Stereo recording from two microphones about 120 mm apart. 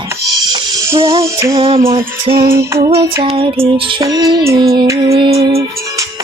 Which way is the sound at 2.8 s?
25° right (ahead or behind).